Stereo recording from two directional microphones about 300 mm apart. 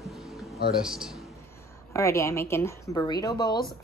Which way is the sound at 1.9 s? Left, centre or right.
Centre.